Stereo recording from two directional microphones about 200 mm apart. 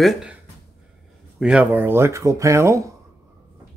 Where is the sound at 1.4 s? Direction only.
5° right (ahead or behind).